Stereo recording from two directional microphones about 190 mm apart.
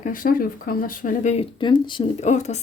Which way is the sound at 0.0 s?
45° left (ahead or behind).